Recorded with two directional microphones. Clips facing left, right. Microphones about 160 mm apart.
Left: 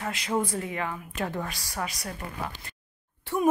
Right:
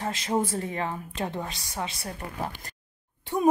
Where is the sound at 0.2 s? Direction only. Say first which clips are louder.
Right 1 dB; 30° right (ahead or behind).